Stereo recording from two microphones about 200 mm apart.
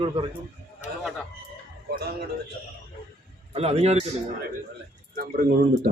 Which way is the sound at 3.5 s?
30° right (ahead or behind).